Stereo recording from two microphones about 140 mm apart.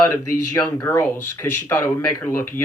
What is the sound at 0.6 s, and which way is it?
Speech, 10° left (ahead or behind).